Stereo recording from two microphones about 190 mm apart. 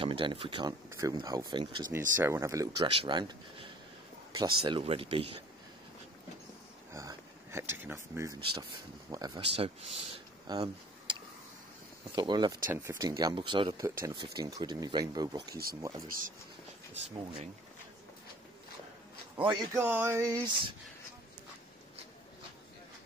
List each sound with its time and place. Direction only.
0.0 s speech: 25° right (ahead or behind)
1.9 s speech: 15° right (ahead or behind)
2.8 s speech: 30° right (ahead or behind)
4.4 s speech: 25° right (ahead or behind)
6.9 s speech: 15° right (ahead or behind)
10.4 s a sound: 20° right (ahead or behind)
12.2 s speech: 25° right (ahead or behind)
12.6 s speech: 10° right (ahead or behind)
15.5 s speech: 50° right (ahead or behind)
16.9 s speech: 30° right (ahead or behind)
19.4 s speech: 20° right (ahead or behind)